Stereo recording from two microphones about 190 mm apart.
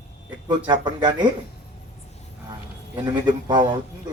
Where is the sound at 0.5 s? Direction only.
25° right (ahead or behind).